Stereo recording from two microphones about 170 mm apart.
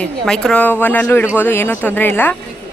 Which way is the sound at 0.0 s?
5° left (ahead or behind).